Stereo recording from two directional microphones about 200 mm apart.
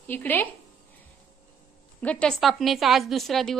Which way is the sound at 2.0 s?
5° left (ahead or behind).